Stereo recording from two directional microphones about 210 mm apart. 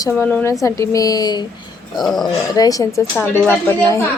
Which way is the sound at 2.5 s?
15° left (ahead or behind).